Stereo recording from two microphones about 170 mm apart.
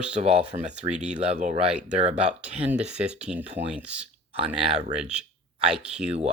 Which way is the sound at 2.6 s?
5° right (ahead or behind).